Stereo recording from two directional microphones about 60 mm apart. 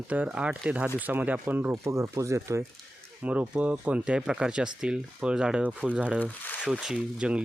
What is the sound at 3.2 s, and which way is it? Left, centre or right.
Speech, right.